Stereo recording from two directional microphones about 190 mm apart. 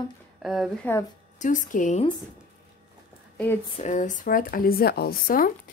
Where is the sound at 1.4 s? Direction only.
40° left (ahead or behind).